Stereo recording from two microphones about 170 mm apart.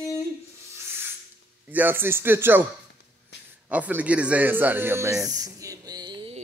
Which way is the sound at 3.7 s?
10° right (ahead or behind).